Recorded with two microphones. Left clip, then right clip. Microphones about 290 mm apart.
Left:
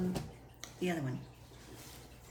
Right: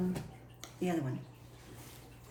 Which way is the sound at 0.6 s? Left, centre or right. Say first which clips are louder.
Right 1 dB; centre.